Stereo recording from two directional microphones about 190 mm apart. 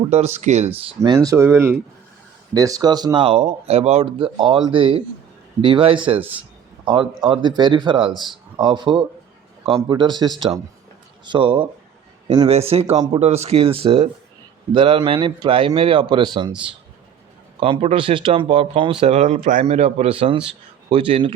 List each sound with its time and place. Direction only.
0.1 s speech: 35° right (ahead or behind)
1.0 s speech: 20° right (ahead or behind)
6.1 s speech: 10° right (ahead or behind)
6.8 s a man's voice: 25° right (ahead or behind)
8.1 s speech: centre (ahead or behind)
8.5 s speech: 25° right (ahead or behind)
17.6 s speech: 30° right (ahead or behind)